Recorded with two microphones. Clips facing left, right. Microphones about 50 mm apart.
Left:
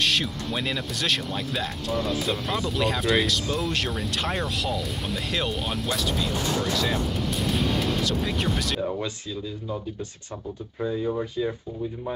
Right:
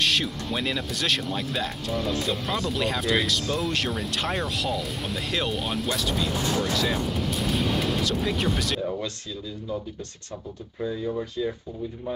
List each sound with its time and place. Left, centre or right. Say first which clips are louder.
0.0 s speech: even; centre
7.4 s music: even; centre
8.8 s speech: left 1 dB; centre
10.8 s speech: left 2 dB; centre